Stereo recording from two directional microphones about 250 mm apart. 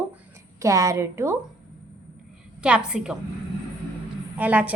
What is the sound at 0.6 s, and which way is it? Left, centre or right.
Speech, centre.